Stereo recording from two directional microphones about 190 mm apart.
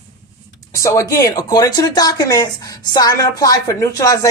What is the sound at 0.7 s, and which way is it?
Speech, 15° left (ahead or behind).